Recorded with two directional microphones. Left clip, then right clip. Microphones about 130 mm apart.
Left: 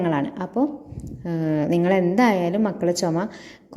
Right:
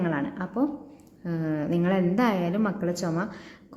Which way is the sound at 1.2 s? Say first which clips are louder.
Left 6 dB; 40° left (ahead or behind).